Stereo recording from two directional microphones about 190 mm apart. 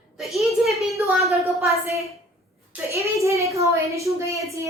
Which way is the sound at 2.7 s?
15° right (ahead or behind).